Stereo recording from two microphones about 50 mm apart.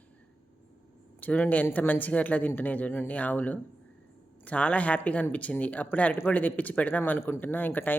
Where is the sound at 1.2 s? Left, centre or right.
Left.